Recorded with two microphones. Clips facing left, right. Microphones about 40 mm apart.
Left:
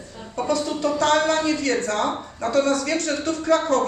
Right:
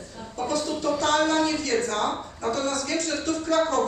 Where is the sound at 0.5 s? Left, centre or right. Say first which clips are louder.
Left 3 dB; left.